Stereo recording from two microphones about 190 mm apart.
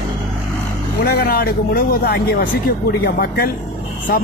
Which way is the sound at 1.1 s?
55° left (ahead or behind).